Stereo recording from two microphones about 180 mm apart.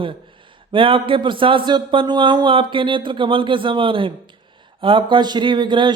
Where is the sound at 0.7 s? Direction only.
30° right (ahead or behind).